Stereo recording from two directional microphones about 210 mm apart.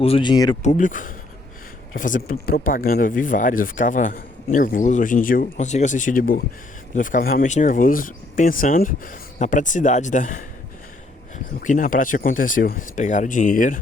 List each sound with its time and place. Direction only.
0.0 s speech: 25° left (ahead or behind)
0.6 s speech: 35° left (ahead or behind)
11.6 s speech: 40° left (ahead or behind)